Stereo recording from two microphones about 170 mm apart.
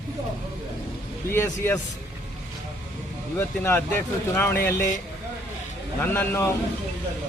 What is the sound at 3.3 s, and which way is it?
Speech, 15° left (ahead or behind).